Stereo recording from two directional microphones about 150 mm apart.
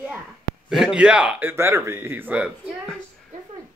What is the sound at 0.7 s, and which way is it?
Speech, 5° right (ahead or behind).